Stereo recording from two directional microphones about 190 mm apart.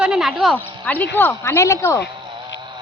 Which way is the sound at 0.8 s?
10° left (ahead or behind).